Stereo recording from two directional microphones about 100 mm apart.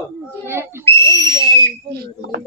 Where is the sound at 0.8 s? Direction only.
30° left (ahead or behind).